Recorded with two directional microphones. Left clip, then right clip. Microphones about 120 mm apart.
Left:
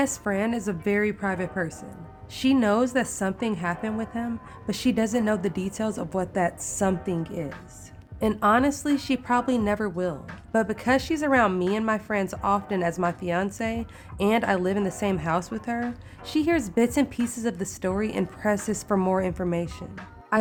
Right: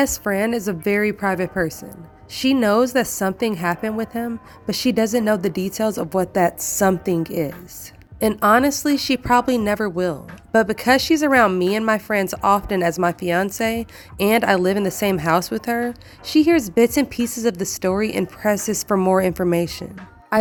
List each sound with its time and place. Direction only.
0.0 s a woman's voice: 45° right (ahead or behind)
8.4 s a woman's voice: 40° right (ahead or behind)
16.2 s speech: 30° right (ahead or behind)
19.1 s a woman's voice: 50° right (ahead or behind)